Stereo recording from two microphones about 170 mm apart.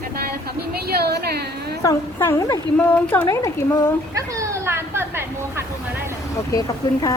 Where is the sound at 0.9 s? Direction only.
70° right (ahead or behind).